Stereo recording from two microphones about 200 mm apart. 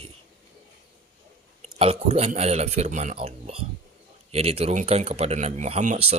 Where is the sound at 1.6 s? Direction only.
30° right (ahead or behind).